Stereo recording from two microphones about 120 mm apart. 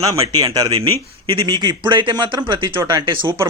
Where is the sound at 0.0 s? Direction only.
30° right (ahead or behind).